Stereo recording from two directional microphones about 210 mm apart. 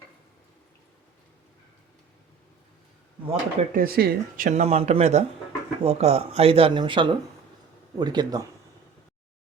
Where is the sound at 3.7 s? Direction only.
45° right (ahead or behind); by 8.5 s 20° right (ahead or behind).